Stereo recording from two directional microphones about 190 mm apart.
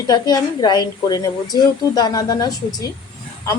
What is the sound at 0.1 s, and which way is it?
A woman's voice, 20° left (ahead or behind).